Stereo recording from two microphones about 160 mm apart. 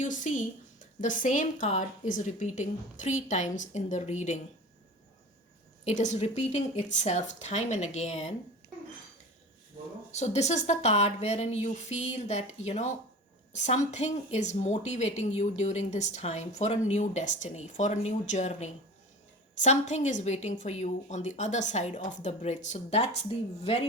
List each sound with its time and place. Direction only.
0.0 s a woman's voice: 55° left (ahead or behind)
5.8 s a woman's voice: 45° left (ahead or behind)
10.1 s a woman's voice: 45° left (ahead or behind)